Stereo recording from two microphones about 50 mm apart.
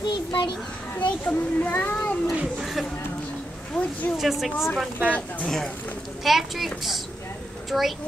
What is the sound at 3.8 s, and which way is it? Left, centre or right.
Speech, left.